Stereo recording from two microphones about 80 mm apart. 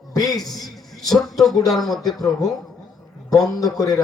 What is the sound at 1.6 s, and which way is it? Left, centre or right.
Speech, centre.